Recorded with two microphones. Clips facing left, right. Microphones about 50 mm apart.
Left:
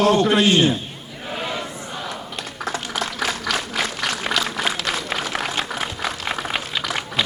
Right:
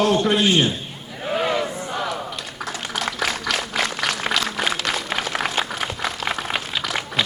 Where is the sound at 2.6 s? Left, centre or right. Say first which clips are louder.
Left 1 dB; centre.